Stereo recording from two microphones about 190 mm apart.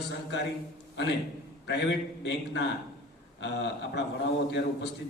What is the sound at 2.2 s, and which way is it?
A man's voice, 65° left (ahead or behind).